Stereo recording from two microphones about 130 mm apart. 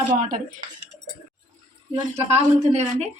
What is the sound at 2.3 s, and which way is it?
Speech, 60° right (ahead or behind).